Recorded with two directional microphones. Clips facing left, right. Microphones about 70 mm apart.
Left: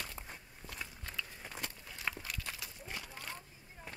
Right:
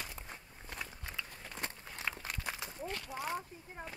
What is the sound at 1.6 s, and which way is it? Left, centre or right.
Walk, right.